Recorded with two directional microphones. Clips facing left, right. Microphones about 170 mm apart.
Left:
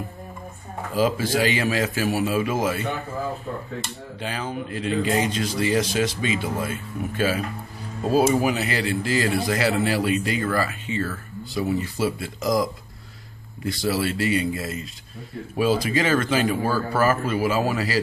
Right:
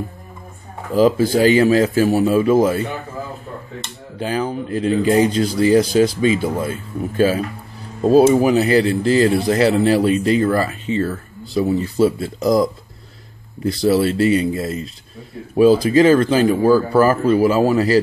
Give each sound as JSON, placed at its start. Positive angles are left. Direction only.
{"t": 0.9, "sound": "speech", "side_deg": -40}
{"t": 4.2, "sound": "speech", "side_deg": -35}
{"t": 13.7, "sound": "speech", "side_deg": -35}